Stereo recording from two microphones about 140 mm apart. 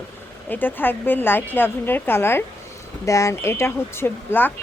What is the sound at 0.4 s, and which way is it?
Speech, 15° left (ahead or behind).